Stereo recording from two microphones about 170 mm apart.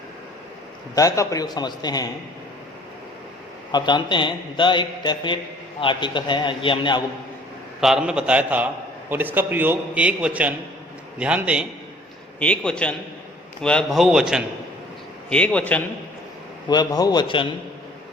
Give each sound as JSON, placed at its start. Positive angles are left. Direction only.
{"t": 0.9, "sound": "a man's voice", "side_deg": 20}
{"t": 3.7, "sound": "a man's voice", "side_deg": 25}
{"t": 7.8, "sound": "a man's voice", "side_deg": -5}
{"t": 12.4, "sound": "a man's voice", "side_deg": 5}
{"t": 15.3, "sound": "a man's voice", "side_deg": 5}
{"t": 16.6, "sound": "a man's voice", "side_deg": 25}